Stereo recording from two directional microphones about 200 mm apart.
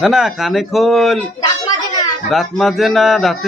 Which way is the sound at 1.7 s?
20° left (ahead or behind).